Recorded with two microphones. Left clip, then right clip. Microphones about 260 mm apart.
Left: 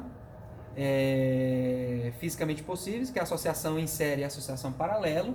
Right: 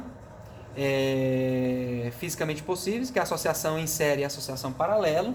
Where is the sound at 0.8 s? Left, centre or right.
Right.